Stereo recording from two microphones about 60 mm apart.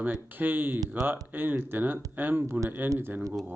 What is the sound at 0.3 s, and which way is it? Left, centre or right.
Speech, right.